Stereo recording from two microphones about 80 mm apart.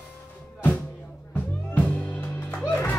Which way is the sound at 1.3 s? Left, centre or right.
Centre.